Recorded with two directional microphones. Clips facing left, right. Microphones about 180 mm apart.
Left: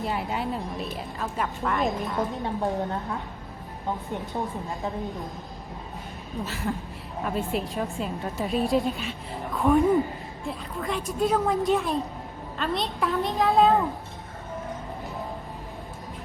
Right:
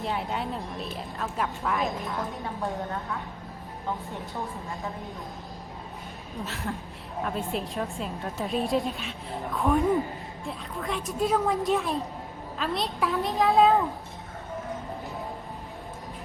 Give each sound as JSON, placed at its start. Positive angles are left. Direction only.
{"t": 0.0, "sound": "a woman's voice", "side_deg": 0}
{"t": 2.6, "sound": "a woman's voice", "side_deg": 20}
{"t": 6.4, "sound": "a woman's voice", "side_deg": 0}